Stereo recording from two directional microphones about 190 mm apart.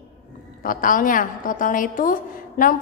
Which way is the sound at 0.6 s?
45° left (ahead or behind).